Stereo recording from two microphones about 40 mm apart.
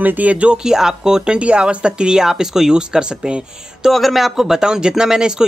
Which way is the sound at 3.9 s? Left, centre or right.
Centre.